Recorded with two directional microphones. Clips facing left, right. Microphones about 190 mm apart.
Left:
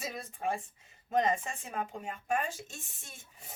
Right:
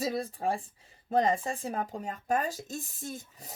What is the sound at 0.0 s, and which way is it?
Speech, 35° right (ahead or behind).